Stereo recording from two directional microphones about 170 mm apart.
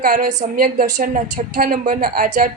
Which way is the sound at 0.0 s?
55° right (ahead or behind).